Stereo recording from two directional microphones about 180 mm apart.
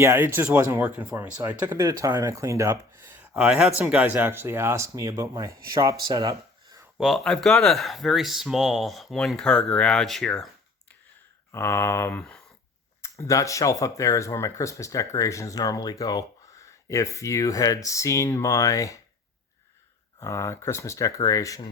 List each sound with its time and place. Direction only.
0.0 s speech: 10° right (ahead or behind)
7.0 s speech: centre (ahead or behind)
11.5 s speech: 15° left (ahead or behind)
20.1 s speech: 15° left (ahead or behind)